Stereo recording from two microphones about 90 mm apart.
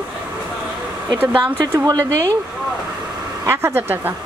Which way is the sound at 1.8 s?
40° right (ahead or behind).